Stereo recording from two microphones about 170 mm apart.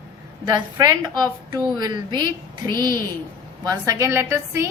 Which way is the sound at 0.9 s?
25° right (ahead or behind).